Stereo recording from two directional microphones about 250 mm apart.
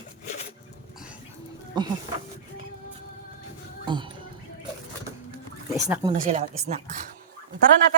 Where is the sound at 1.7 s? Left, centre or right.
Centre.